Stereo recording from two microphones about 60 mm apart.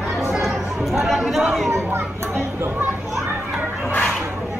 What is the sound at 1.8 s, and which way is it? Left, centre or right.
Children playing, right.